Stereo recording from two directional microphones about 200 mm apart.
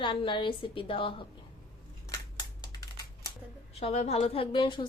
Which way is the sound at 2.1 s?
20° left (ahead or behind).